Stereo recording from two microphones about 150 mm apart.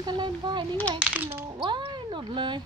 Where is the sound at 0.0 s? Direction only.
30° right (ahead or behind).